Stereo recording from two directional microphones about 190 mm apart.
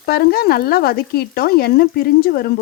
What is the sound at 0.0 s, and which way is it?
Speech, 55° left (ahead or behind).